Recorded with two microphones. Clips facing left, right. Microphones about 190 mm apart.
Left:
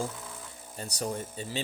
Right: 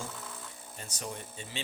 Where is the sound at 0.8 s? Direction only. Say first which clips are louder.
Left 8 dB; 35° left (ahead or behind).